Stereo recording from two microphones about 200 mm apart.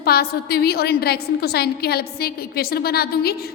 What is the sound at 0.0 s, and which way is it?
A woman's voice, 50° left (ahead or behind).